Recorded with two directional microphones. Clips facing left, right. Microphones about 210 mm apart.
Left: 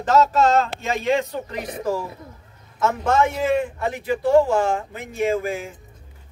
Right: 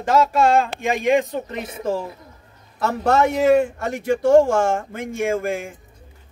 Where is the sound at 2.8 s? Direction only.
40° right (ahead or behind).